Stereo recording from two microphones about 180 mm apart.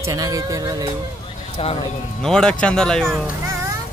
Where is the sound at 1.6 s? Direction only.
35° left (ahead or behind).